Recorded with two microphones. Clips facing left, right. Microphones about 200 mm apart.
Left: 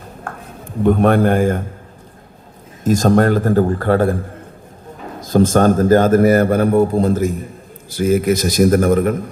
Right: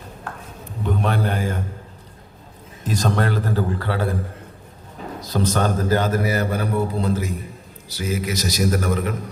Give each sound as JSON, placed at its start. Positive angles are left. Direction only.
{"t": 0.3, "sound": "a sound", "side_deg": 50}
{"t": 0.8, "sound": "a man's voice", "side_deg": 55}
{"t": 2.8, "sound": "a man's voice", "side_deg": 45}
{"t": 5.2, "sound": "a man's voice", "side_deg": 50}